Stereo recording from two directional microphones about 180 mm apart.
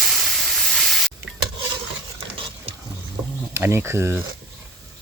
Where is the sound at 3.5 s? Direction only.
15° right (ahead or behind).